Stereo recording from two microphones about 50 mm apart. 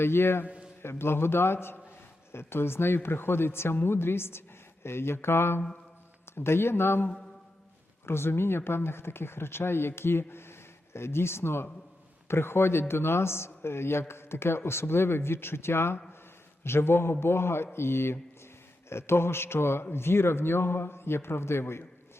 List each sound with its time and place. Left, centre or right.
0.0 s speech: left
0.4 s a sound: right
0.8 s a man's voice: left